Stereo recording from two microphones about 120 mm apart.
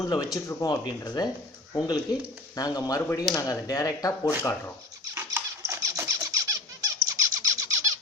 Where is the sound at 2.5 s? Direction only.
30° left (ahead or behind).